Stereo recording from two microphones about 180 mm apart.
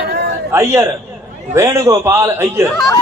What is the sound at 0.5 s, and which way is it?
A man's voice, 15° right (ahead or behind).